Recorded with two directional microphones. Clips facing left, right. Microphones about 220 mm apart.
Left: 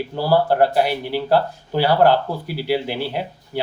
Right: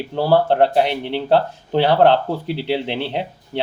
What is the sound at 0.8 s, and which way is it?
Speech, 5° left (ahead or behind).